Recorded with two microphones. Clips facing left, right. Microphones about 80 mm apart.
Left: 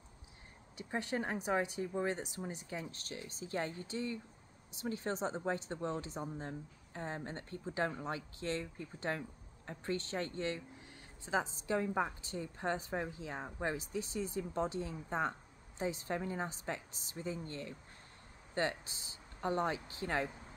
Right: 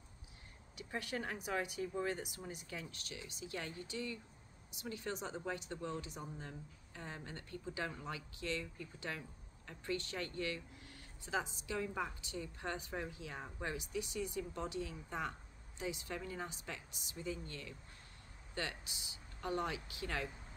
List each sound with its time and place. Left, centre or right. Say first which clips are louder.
0.7 s a woman's voice: left 5 dB; left